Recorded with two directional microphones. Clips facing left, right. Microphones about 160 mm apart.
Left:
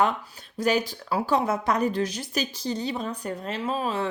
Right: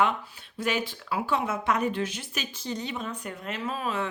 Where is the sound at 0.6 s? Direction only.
40° left (ahead or behind).